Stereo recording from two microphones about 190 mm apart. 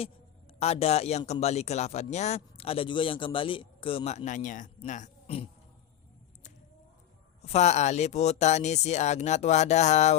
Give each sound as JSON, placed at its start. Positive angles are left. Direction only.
{"t": 0.6, "sound": "speech", "side_deg": 35}
{"t": 7.5, "sound": "speech", "side_deg": 35}